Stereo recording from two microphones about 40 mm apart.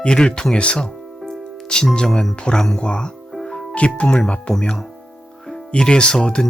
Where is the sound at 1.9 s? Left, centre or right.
Centre.